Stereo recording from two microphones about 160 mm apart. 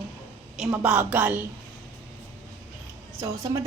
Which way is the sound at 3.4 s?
20° right (ahead or behind).